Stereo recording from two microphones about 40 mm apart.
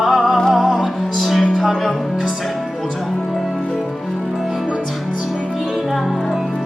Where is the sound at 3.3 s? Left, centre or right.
Centre.